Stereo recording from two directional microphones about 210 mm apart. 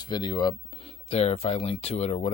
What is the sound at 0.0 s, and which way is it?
Speech, 20° left (ahead or behind).